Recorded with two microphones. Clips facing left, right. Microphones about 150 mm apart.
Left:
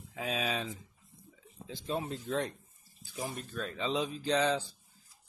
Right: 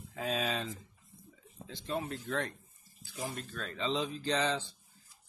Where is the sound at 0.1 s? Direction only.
5° left (ahead or behind).